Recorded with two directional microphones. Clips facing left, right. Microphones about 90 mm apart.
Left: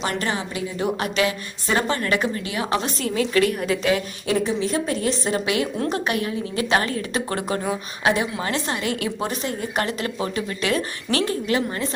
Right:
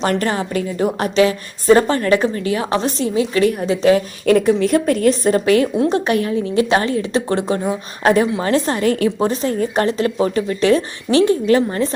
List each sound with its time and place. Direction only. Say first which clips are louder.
0.0 s a woman's voice: right 7 dB; 45° right (ahead or behind)
4.3 s a woman's voice: right 9 dB; 60° right (ahead or behind); by 7.6 s 25° right (ahead or behind)
8.0 s a woman's voice: right 7 dB; 40° right (ahead or behind); by 11.5 s 25° right (ahead or behind)